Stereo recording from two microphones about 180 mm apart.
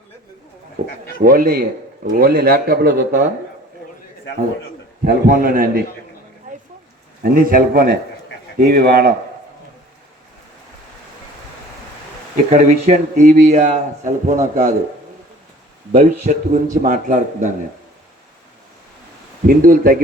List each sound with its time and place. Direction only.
1.2 s speech: 55° right (ahead or behind)
5.0 s speech: 50° right (ahead or behind)
7.2 s speech: 50° right (ahead or behind)
12.5 s speech: 45° right (ahead or behind)
15.9 s speech: 40° right (ahead or behind)
19.5 s speech: 50° right (ahead or behind)